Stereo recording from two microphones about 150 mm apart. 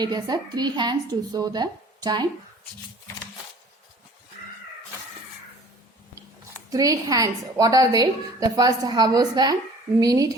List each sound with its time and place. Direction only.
0.0 s a woman's voice: 30° right (ahead or behind)
6.7 s a woman's voice: 25° right (ahead or behind)